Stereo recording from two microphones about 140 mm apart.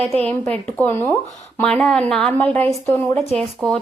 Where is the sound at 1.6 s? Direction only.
5° left (ahead or behind).